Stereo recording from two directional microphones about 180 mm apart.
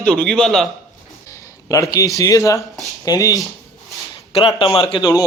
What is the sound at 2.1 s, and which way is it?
A man's voice, 20° left (ahead or behind).